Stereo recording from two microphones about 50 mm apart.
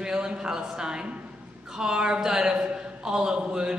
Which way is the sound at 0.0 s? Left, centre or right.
Centre.